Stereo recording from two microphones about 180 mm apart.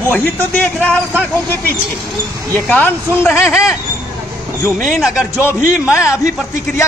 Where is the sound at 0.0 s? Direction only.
10° left (ahead or behind).